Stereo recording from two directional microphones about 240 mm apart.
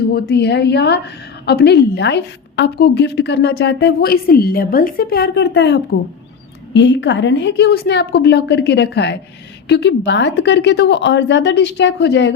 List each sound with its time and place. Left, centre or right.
0.1 s a woman's voice: left